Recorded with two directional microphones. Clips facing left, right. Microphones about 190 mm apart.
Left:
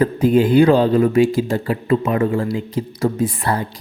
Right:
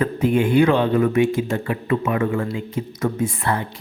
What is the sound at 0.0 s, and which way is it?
Speech, 35° left (ahead or behind).